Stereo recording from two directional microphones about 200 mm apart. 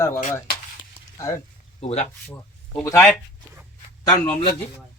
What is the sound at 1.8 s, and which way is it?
Speech, 30° left (ahead or behind).